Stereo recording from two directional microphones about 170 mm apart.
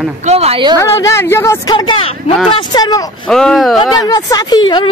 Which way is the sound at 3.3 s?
5° left (ahead or behind).